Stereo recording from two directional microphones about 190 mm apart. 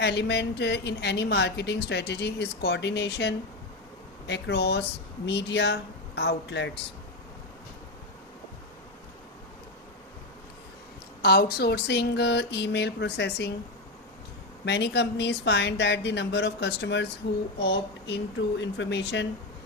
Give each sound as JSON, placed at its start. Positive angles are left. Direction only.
{"t": 0.0, "sound": "a woman's voice", "side_deg": 60}
{"t": 11.2, "sound": "a woman's voice", "side_deg": 55}
{"t": 14.6, "sound": "a woman's voice", "side_deg": 65}